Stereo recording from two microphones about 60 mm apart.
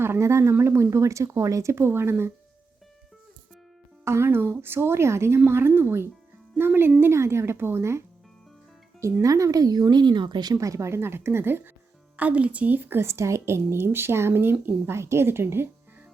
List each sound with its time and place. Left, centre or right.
0.0 s speech: right
1.8 s speech: right
4.0 s speech: right
7.0 s speech: right
9.2 s speech: right
10.5 s speech: right
12.1 s speech: right